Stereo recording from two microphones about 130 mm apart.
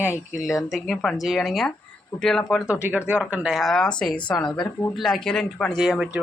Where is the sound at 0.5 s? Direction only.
Centre (ahead or behind).